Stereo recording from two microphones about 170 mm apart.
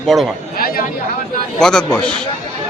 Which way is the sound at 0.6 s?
60° left (ahead or behind).